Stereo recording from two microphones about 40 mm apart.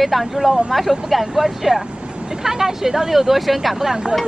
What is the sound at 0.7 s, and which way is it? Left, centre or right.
Speech, centre.